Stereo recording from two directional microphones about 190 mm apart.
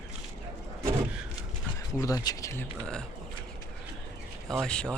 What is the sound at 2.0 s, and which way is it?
Speech, 20° left (ahead or behind).